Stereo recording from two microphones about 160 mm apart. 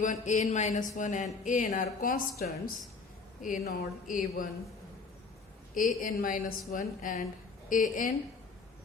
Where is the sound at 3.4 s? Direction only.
65° left (ahead or behind).